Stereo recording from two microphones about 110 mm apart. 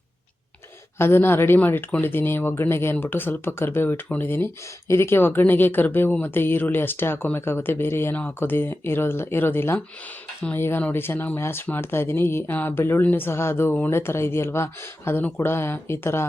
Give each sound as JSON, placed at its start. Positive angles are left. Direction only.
{"t": 0.9, "sound": "speech", "side_deg": 20}